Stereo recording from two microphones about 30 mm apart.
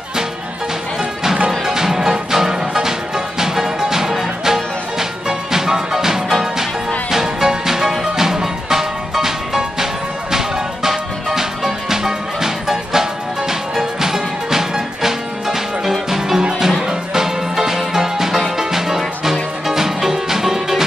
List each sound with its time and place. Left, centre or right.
1.7 s music: centre